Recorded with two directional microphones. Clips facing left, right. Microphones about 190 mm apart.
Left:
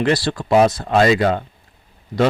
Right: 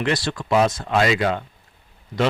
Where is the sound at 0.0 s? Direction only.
35° left (ahead or behind).